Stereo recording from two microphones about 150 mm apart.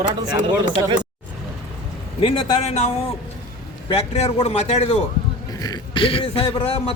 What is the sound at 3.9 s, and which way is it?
Speech, 40° left (ahead or behind).